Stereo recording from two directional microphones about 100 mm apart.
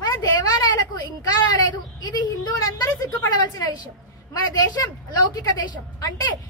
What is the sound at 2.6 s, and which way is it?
A child's voice, 35° left (ahead or behind).